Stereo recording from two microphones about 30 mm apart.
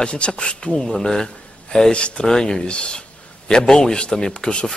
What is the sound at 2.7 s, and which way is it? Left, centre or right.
Speech, left.